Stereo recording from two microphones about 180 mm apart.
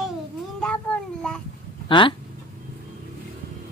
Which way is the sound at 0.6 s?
5° left (ahead or behind).